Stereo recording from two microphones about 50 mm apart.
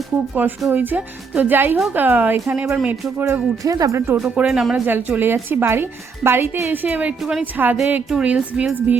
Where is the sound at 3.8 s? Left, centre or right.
Right.